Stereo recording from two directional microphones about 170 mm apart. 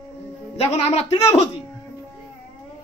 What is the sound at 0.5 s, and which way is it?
Speech, 40° left (ahead or behind).